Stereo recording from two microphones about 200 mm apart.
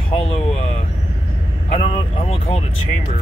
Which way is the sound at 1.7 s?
30° left (ahead or behind).